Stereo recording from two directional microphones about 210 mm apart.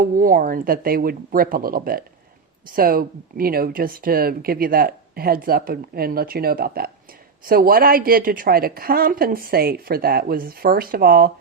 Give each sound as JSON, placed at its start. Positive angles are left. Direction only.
{"t": 0.0, "sound": "speech", "side_deg": -40}